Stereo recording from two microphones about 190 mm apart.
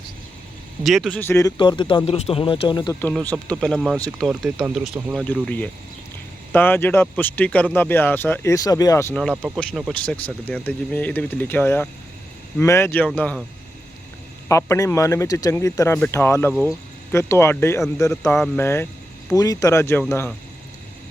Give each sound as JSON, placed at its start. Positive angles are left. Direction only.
{"t": 0.9, "sound": "speech", "side_deg": 0}
{"t": 1.2, "sound": "speech", "side_deg": 15}
{"t": 3.1, "sound": "speech", "side_deg": 0}
{"t": 9.7, "sound": "speech", "side_deg": 5}
{"t": 14.4, "sound": "speech", "side_deg": 15}